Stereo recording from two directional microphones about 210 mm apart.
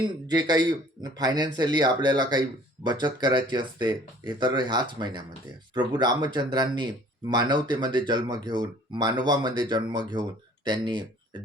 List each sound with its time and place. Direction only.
0.0 s speech: 20° right (ahead or behind)